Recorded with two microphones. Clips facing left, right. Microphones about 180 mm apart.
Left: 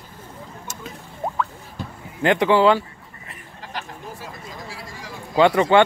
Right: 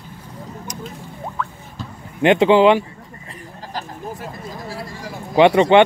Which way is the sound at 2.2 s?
25° right (ahead or behind).